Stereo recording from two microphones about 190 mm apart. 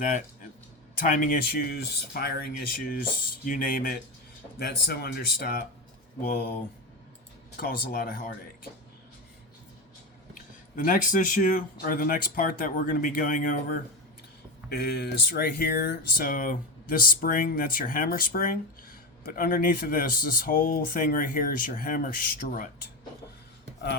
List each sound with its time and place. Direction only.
0.9 s speech: 45° left (ahead or behind)
7.5 s speech: 50° left (ahead or behind)
10.3 s speech: 45° left (ahead or behind)
14.7 s speech: 55° left (ahead or behind)